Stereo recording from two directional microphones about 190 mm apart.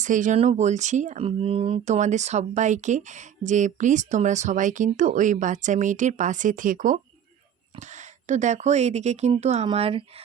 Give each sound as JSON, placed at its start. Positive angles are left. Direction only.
{"t": 0.0, "sound": "speech", "side_deg": -40}